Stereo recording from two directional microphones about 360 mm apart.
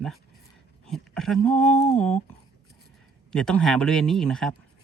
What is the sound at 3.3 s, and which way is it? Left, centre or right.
Speech, centre.